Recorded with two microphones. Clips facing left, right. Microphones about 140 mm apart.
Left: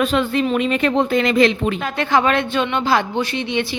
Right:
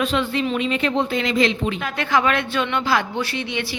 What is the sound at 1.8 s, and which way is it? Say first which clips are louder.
Speech: left 3 dB; 30° left (ahead or behind).